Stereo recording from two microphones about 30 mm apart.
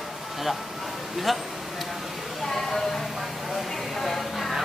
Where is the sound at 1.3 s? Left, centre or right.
Centre.